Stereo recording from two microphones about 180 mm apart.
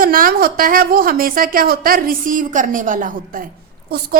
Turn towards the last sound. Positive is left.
turn(degrees=-60)  # may be behind; listen again after turning